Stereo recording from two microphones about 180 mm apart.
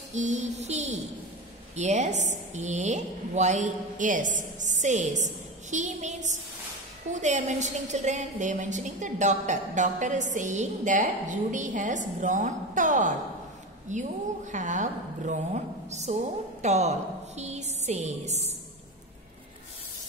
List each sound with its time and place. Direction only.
0.1 s a woman's voice: 40° right (ahead or behind)
17.4 s music: 40° right (ahead or behind)